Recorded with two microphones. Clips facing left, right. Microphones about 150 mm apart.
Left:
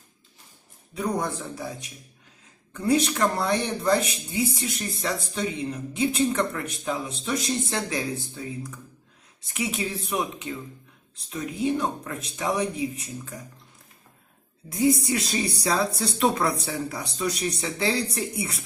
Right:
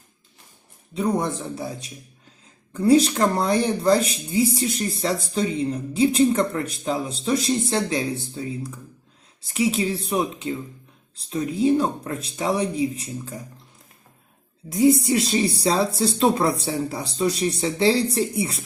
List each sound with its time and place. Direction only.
0.9 s speech: 25° right (ahead or behind)
9.5 s speech: 30° right (ahead or behind)
14.8 s speech: 25° right (ahead or behind)